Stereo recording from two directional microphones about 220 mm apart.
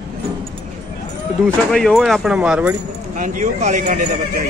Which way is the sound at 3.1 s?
35° right (ahead or behind).